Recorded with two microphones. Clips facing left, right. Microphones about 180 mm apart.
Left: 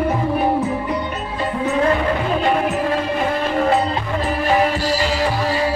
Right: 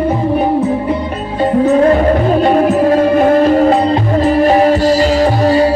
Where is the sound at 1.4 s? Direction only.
40° right (ahead or behind).